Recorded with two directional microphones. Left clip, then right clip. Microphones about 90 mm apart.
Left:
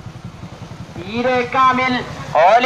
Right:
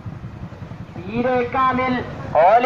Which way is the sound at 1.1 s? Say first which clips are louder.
Left 2 dB; 20° left (ahead or behind).